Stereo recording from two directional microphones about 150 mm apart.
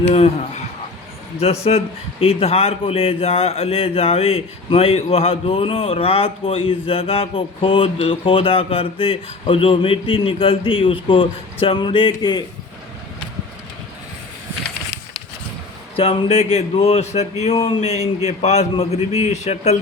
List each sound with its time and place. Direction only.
0.0 s speech: 40° left (ahead or behind)
1.7 s a man's voice: 45° left (ahead or behind); by 12.5 s 30° left (ahead or behind)
16.0 s speech: 45° left (ahead or behind)